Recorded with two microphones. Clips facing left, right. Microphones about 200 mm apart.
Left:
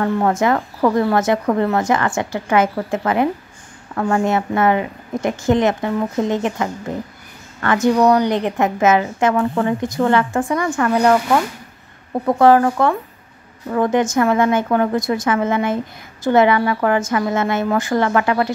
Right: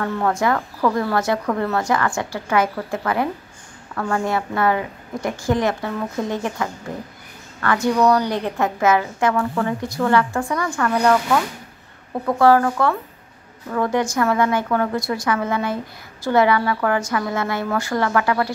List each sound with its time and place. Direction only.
0.0 s a woman's voice: 25° left (ahead or behind)